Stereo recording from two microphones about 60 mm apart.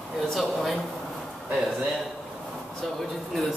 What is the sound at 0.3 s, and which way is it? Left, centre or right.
Speech, centre.